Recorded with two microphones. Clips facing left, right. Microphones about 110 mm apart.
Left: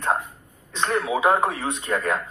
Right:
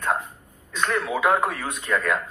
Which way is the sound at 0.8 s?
25° left (ahead or behind).